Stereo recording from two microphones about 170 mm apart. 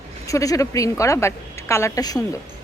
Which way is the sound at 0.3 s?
20° left (ahead or behind).